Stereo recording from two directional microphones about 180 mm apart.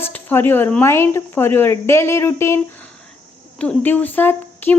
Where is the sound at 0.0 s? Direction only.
10° left (ahead or behind).